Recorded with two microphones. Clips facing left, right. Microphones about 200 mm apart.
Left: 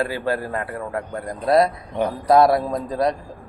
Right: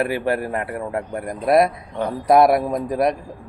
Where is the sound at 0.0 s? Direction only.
20° right (ahead or behind).